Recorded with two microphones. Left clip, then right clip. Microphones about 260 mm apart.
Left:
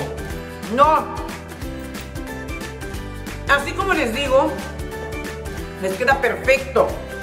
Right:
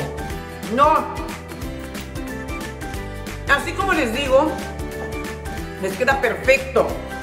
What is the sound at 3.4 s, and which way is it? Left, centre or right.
Speech, centre.